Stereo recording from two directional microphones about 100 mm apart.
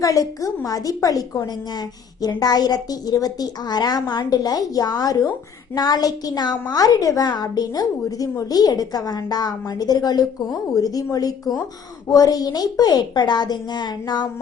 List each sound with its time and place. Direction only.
0.0 s a woman's voice: 35° left (ahead or behind)